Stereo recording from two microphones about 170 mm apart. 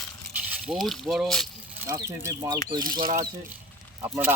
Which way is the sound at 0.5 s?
5° right (ahead or behind).